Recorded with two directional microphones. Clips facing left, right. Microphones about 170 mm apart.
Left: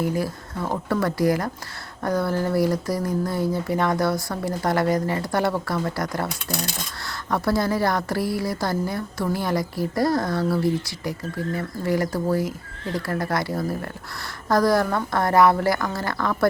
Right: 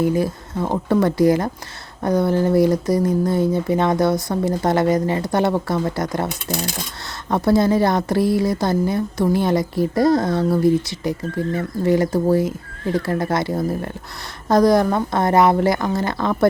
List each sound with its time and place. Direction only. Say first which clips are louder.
0.0 s speech: right 6 dB; 20° right (ahead or behind)
7.3 s speech: right 6 dB; 20° right (ahead or behind)